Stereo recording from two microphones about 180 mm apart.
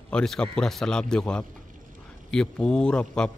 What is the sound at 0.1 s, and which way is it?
Speech, 5° left (ahead or behind).